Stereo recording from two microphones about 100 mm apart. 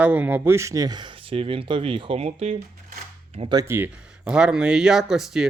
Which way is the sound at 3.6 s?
25° right (ahead or behind).